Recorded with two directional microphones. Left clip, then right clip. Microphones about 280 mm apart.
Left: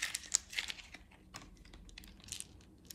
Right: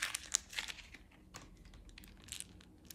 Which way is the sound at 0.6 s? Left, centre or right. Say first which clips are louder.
Left 2 dB; centre.